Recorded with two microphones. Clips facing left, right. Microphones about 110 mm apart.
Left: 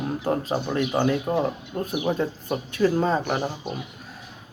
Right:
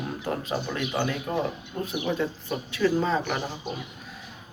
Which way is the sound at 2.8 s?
30° left (ahead or behind).